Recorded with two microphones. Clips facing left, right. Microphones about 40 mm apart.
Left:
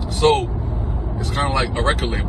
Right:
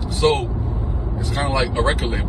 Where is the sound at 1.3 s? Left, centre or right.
Left.